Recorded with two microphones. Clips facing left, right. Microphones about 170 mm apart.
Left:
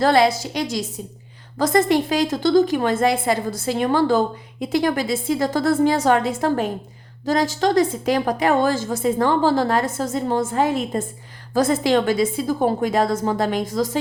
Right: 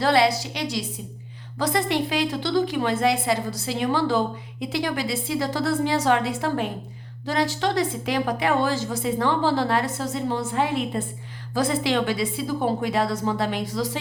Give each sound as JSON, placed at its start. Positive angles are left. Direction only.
{"t": 0.0, "sound": "a woman's voice", "side_deg": 45}